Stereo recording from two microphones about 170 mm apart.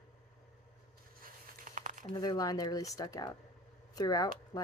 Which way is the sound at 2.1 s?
25° left (ahead or behind).